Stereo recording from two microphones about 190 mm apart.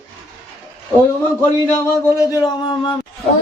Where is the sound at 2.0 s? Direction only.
20° left (ahead or behind).